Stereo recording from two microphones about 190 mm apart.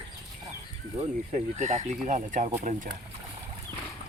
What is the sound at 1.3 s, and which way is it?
Speech, 40° right (ahead or behind).